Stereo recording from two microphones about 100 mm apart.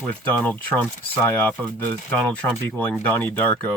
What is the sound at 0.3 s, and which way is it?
Speech, 15° left (ahead or behind).